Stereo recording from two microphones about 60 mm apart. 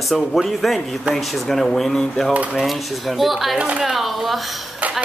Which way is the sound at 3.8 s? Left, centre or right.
Centre.